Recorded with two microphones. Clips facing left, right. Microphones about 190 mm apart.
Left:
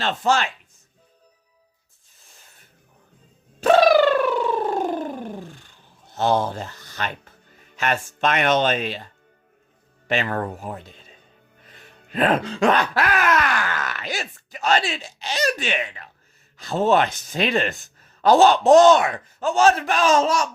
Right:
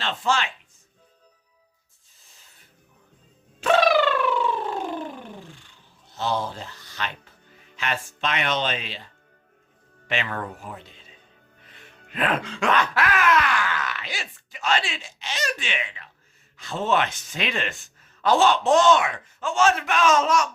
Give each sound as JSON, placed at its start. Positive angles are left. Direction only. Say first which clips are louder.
{"t": 0.0, "sound": "speech", "louder": "left 4 dB", "side_deg": 45}
{"t": 3.6, "sound": "bird", "louder": "left 5 dB", "side_deg": 40}
{"t": 6.1, "sound": "speech", "louder": "left 6 dB", "side_deg": 50}
{"t": 10.1, "sound": "speech", "louder": "left 5 dB", "side_deg": 40}
{"t": 11.6, "sound": "music", "louder": "left 1 dB", "side_deg": 40}
{"t": 16.6, "sound": "speech", "louder": "left 5 dB", "side_deg": 40}